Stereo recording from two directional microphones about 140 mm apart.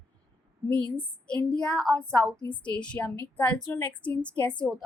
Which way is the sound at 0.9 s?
5° left (ahead or behind).